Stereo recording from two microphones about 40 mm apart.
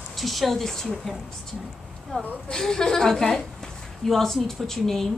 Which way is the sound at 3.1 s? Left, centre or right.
Centre.